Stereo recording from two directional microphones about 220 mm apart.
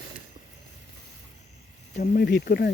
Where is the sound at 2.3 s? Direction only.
50° left (ahead or behind).